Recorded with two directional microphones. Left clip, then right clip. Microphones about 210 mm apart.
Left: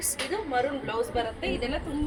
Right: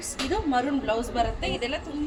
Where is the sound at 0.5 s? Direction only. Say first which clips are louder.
Right 2 dB; 45° right (ahead or behind).